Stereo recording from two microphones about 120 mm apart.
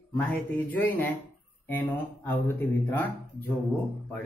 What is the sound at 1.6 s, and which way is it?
Speech, 20° left (ahead or behind).